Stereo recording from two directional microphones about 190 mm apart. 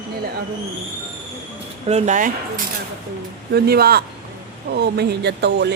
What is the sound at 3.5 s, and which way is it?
Speech, 55° right (ahead or behind).